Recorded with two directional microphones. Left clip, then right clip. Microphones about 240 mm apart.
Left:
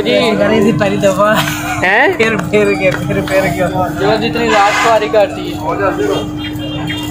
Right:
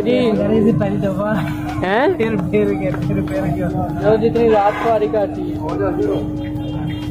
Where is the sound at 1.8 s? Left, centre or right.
Centre.